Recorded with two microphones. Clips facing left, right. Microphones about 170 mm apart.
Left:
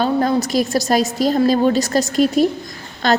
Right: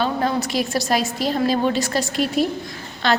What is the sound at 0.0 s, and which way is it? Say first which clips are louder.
A woman's voice: left 4 dB; 40° left (ahead or behind).